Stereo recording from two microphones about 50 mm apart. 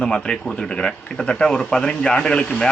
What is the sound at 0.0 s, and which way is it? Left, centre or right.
A man's voice, left.